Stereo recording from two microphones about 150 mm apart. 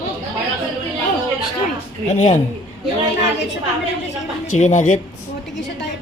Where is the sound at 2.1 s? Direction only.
50° left (ahead or behind).